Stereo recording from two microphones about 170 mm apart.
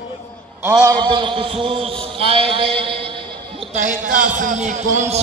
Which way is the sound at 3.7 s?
50° right (ahead or behind).